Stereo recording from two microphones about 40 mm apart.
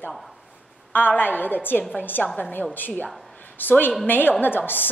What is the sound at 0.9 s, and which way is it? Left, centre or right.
A woman's voice, left.